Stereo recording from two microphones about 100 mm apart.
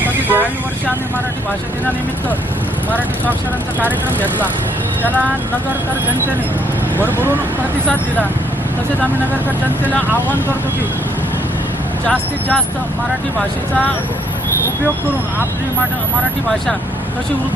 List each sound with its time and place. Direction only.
0.0 s vehicle: 20° right (ahead or behind)
7.0 s speech: 20° right (ahead or behind)
12.0 s speech: 10° left (ahead or behind)